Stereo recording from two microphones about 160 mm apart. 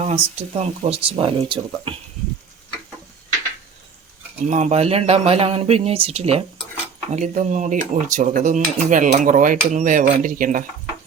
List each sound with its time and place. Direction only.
0.0 s speech: 40° right (ahead or behind)
4.4 s speech: 45° right (ahead or behind)